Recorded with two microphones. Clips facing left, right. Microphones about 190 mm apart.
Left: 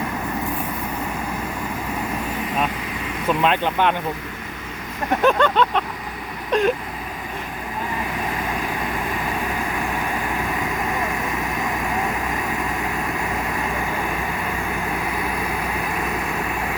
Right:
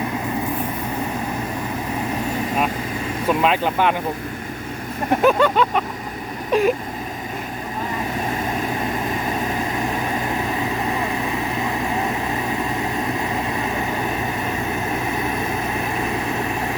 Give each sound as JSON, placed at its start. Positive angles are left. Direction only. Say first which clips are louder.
{"t": 3.2, "sound": "speech", "louder": "right 1 dB", "side_deg": -5}
{"t": 5.2, "sound": "vehicle", "louder": "right 1 dB", "side_deg": -10}
{"t": 10.5, "sound": "vehicle", "louder": "right 2 dB", "side_deg": -30}
{"t": 13.7, "sound": "vehicle", "louder": "right 2 dB", "side_deg": -25}